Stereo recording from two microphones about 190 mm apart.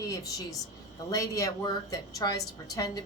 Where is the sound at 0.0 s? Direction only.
15° left (ahead or behind).